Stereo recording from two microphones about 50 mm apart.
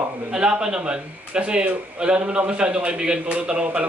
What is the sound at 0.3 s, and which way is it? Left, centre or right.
A man's voice, centre.